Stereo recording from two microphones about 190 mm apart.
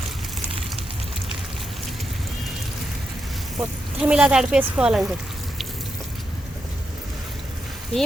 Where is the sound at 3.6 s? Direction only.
5° right (ahead or behind).